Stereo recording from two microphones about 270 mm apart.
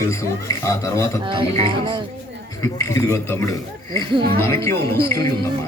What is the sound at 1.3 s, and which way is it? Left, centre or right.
Speech, centre.